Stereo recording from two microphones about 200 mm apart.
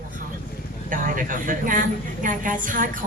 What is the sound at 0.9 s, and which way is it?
A woman's voice, 40° right (ahead or behind).